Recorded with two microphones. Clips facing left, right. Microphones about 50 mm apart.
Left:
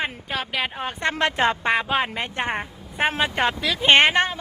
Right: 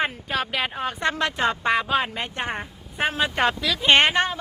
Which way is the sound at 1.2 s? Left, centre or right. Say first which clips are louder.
Left 4 dB; left.